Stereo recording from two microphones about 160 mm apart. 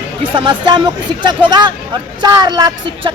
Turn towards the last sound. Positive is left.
turn(degrees=-25)  # may be behind; listen again after turning